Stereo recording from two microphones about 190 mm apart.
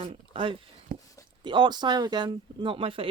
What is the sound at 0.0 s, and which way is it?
Speech, 30° right (ahead or behind).